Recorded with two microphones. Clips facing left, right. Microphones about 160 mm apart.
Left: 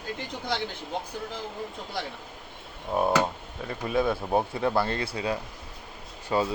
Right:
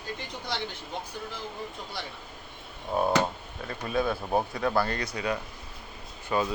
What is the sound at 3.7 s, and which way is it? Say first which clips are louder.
A man's voice: left 2 dB; 20° left (ahead or behind).